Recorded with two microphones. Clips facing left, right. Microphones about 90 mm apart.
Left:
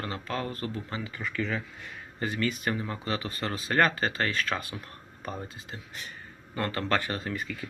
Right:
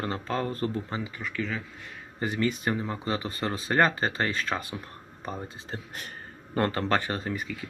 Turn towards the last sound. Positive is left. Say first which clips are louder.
# right 2 dB
turn(degrees=-25)  # may be behind; listen again after turning